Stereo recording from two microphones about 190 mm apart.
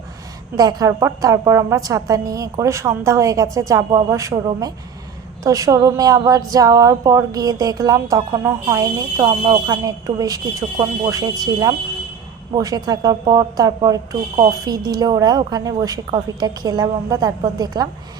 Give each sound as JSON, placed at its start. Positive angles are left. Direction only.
{"t": 0.5, "sound": "a woman's voice", "side_deg": -20}